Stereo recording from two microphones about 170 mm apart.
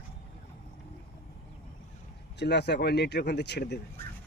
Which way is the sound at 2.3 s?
75° left (ahead or behind).